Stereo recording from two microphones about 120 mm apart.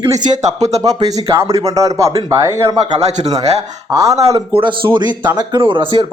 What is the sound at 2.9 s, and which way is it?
Speech, 65° right (ahead or behind).